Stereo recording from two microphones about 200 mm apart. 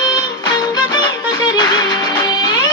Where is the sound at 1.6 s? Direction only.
20° left (ahead or behind).